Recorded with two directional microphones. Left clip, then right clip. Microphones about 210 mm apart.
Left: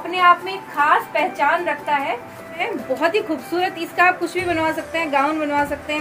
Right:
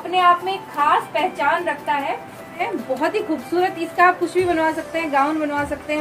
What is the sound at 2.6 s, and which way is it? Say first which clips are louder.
A woman's voice: left 1 dB; 40° left (ahead or behind).